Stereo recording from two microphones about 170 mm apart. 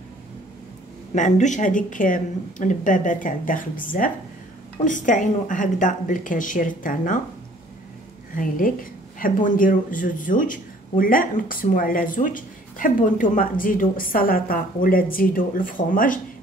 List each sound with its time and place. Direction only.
1.1 s a woman's voice: 45° left (ahead or behind)
8.4 s a woman's voice: 55° left (ahead or behind)